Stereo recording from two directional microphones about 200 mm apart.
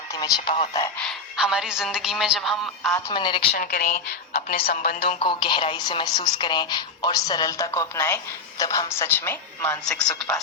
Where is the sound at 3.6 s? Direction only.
45° left (ahead or behind).